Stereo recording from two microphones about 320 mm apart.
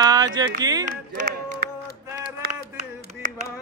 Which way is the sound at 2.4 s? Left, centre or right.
Right.